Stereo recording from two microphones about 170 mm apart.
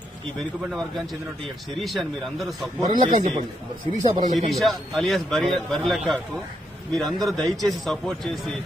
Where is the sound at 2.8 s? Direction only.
25° right (ahead or behind).